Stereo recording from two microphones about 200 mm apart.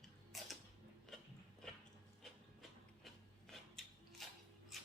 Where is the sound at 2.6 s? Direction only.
Centre (ahead or behind).